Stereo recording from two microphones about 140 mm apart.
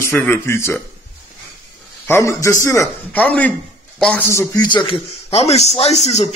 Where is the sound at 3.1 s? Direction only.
10° left (ahead or behind).